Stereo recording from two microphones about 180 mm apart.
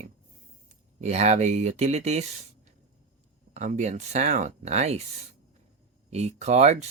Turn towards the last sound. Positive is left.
turn(degrees=-40)  # may be behind; listen again after turning